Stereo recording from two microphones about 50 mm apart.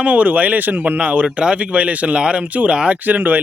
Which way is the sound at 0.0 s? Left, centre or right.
Right.